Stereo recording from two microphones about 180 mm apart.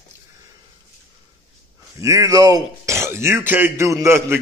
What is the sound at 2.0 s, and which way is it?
Speech, 20° right (ahead or behind).